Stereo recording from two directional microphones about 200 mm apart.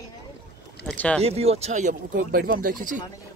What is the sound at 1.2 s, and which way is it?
Speech, 30° right (ahead or behind).